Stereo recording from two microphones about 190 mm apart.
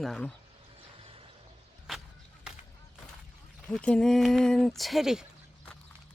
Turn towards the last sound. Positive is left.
turn(degrees=0)  # may be behind; listen again after turning